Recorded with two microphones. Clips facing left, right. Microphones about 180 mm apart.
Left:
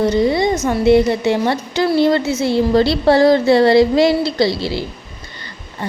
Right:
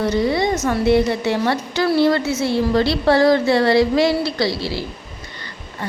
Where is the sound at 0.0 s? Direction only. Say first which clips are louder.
Left 3 dB; 20° left (ahead or behind).